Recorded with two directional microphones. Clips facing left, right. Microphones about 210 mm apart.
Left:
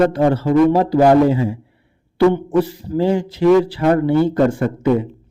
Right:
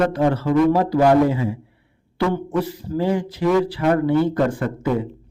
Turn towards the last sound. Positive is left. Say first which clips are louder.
# left 5 dB
turn(degrees=25)  # may be behind; listen again after turning